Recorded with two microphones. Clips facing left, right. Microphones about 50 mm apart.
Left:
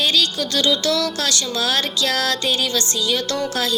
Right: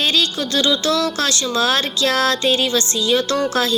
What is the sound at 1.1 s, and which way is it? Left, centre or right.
Music, right.